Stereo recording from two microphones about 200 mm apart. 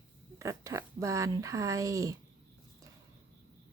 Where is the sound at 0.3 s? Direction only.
15° right (ahead or behind).